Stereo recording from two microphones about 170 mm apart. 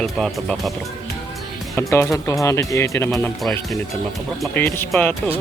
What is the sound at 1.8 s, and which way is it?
Speech, 15° left (ahead or behind).